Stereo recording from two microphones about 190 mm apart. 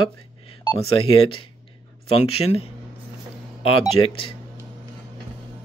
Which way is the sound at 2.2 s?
35° left (ahead or behind).